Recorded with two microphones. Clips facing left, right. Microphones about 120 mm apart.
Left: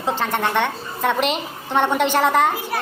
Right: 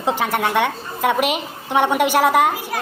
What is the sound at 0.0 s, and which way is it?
A woman's voice, 15° right (ahead or behind).